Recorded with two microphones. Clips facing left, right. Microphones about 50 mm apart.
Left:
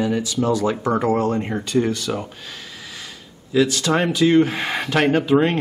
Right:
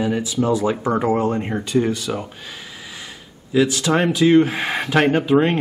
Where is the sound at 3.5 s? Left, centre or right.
Centre.